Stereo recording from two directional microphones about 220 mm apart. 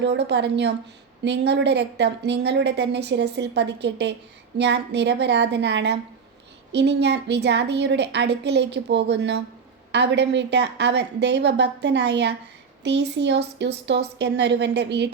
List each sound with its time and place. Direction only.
0.0 s a woman's voice: 50° right (ahead or behind)